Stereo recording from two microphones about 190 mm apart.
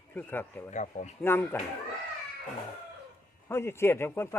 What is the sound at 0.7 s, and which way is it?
Speech, 40° left (ahead or behind).